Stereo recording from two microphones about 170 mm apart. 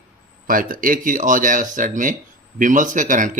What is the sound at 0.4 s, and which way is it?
Speech, 55° right (ahead or behind).